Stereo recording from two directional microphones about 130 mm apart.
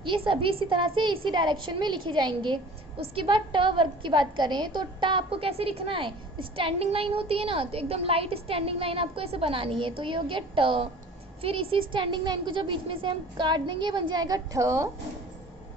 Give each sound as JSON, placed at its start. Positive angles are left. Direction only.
{"t": 0.0, "sound": "a woman's voice", "side_deg": -40}